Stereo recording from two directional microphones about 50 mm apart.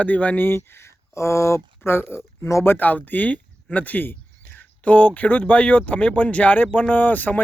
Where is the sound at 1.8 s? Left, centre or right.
Left.